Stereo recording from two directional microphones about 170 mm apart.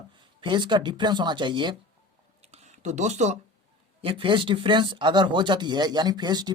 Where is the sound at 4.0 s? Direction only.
30° right (ahead or behind).